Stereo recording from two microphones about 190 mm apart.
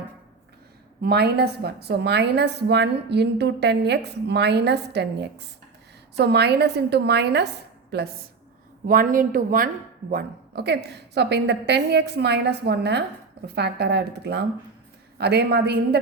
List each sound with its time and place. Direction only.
1.0 s a woman's voice: 55° right (ahead or behind)
8.9 s a woman's voice: 45° right (ahead or behind)